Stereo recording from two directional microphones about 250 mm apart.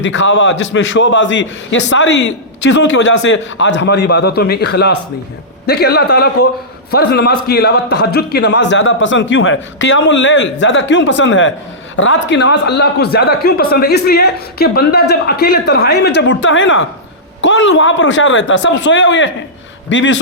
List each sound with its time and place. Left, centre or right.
0.0 s a man's voice: left